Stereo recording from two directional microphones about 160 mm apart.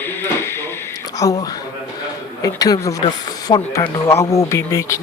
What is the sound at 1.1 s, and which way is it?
Speech, 20° left (ahead or behind).